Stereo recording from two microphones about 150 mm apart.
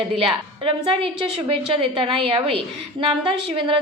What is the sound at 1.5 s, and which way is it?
A woman's voice, 35° right (ahead or behind).